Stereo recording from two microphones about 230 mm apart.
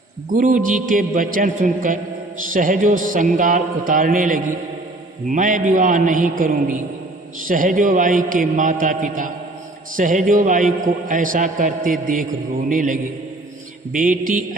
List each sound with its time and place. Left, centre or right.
0.3 s a man's voice: right